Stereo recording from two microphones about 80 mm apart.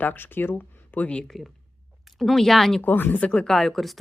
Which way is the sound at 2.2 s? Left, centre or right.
Centre.